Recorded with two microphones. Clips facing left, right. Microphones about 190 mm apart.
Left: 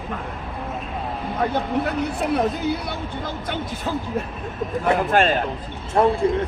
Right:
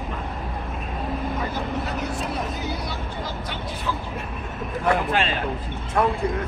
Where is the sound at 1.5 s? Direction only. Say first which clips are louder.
Left 5 dB; 60° left (ahead or behind).